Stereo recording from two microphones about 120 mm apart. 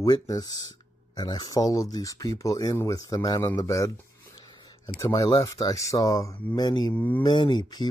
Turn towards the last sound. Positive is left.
turn(degrees=35)  # may be behind; listen again after turning